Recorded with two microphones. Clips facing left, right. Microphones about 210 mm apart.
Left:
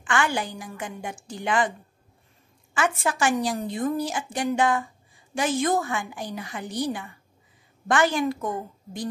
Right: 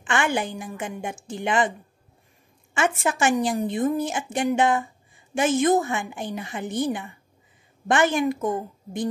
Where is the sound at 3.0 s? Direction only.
20° right (ahead or behind).